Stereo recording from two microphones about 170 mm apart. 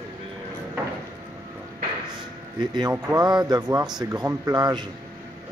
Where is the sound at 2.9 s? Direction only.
20° right (ahead or behind).